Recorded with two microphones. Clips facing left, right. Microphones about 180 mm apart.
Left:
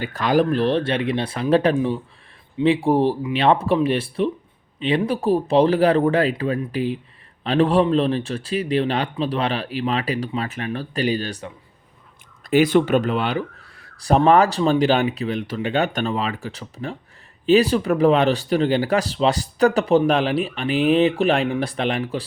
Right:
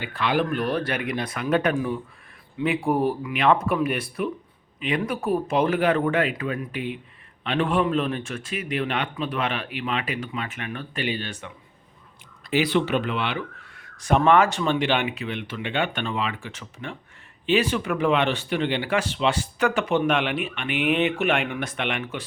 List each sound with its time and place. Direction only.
0.0 s speech: 40° left (ahead or behind)
12.5 s speech: 45° left (ahead or behind)